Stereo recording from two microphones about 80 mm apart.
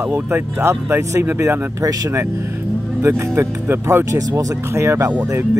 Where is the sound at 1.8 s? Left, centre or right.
Right.